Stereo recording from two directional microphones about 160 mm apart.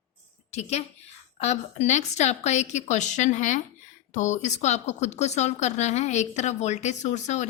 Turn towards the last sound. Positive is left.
turn(degrees=45)  # may be behind; listen again after turning